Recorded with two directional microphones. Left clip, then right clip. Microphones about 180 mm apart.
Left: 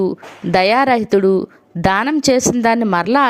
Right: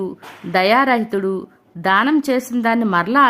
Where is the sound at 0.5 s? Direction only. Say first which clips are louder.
Left 2 dB; 35° left (ahead or behind).